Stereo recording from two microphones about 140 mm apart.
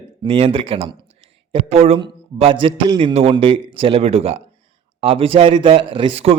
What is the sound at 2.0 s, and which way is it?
A man's voice, 35° right (ahead or behind).